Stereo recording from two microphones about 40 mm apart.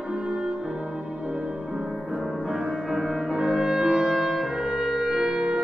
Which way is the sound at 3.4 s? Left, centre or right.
Right.